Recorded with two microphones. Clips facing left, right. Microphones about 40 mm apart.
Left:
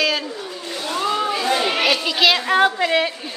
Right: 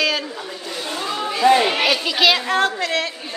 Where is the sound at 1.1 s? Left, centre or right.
Centre.